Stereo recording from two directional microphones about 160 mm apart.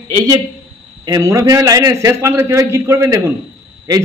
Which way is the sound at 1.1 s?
20° right (ahead or behind).